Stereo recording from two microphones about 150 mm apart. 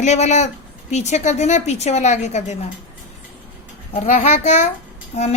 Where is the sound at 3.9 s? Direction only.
45° left (ahead or behind).